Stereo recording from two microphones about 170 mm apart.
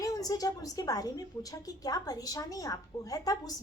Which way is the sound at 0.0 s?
20° left (ahead or behind).